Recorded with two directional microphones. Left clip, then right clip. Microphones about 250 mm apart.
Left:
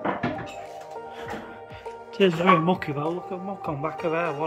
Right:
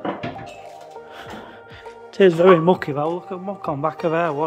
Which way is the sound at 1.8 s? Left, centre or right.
Centre.